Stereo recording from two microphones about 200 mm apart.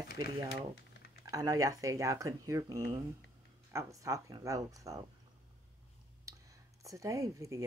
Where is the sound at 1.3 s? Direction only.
15° right (ahead or behind).